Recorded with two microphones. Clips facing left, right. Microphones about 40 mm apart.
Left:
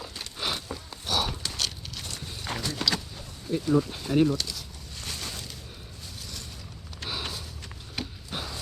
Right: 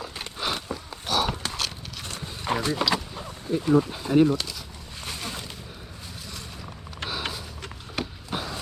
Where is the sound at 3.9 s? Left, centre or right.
Centre.